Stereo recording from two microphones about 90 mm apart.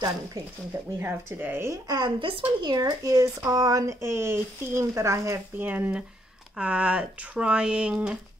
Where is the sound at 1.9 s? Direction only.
55° right (ahead or behind); by 2.7 s 75° right (ahead or behind).